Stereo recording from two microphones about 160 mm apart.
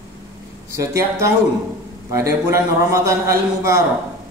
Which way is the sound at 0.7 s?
20° right (ahead or behind).